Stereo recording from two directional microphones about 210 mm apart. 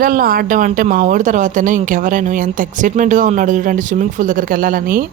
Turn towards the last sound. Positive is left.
turn(degrees=-40)  # may be behind; listen again after turning